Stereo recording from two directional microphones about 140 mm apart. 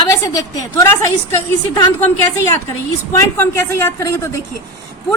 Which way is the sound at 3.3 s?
20° left (ahead or behind).